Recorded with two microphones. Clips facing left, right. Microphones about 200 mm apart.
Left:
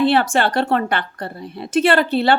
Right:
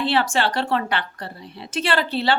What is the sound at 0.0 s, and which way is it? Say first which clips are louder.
A woman's voice: left 5 dB; 50° left (ahead or behind).